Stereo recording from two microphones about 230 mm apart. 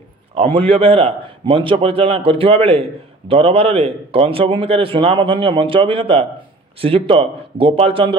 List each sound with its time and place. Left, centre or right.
0.7 s a man's voice: right